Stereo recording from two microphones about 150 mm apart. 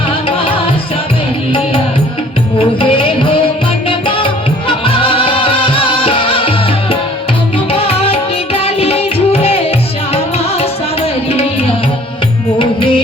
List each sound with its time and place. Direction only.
2.6 s music: 35° left (ahead or behind)